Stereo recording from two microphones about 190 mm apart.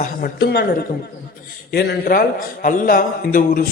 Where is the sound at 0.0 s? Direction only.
50° left (ahead or behind).